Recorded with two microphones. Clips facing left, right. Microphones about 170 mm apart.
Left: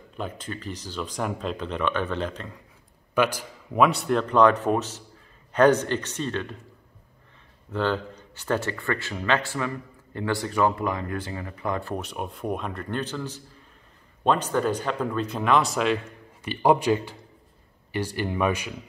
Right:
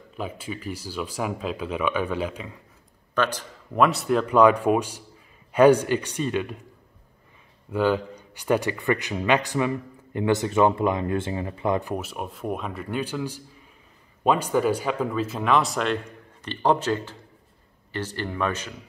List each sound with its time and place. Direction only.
0.2 s speech: 5° right (ahead or behind)
3.2 s a man's voice: 10° left (ahead or behind); by 6.5 s 10° right (ahead or behind)
7.7 s speech: 10° right (ahead or behind)
11.9 s a man's voice: 5° right (ahead or behind); by 18.8 s 10° left (ahead or behind)